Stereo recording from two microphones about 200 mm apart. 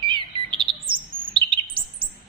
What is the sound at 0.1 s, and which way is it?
Bird, 25° right (ahead or behind).